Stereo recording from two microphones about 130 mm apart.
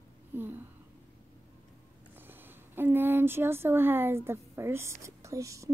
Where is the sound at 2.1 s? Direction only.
15° right (ahead or behind).